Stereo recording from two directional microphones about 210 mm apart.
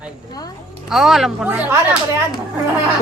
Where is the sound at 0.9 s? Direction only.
Centre (ahead or behind).